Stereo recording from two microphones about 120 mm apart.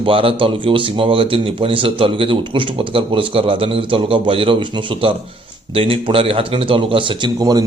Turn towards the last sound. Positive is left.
turn(degrees=-35)  # may be behind; listen again after turning